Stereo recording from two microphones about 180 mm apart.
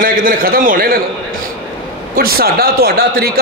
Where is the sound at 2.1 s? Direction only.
55° right (ahead or behind).